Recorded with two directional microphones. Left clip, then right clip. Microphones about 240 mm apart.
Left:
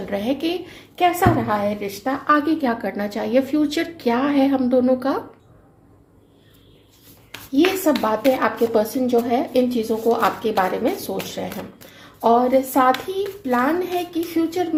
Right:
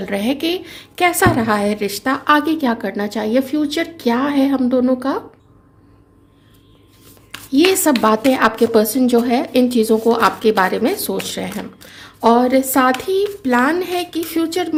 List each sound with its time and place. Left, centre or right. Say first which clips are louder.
0.0 s a woman's voice: right 3 dB; right
7.5 s speech: right 4 dB; right
12.2 s speech: right 3 dB; right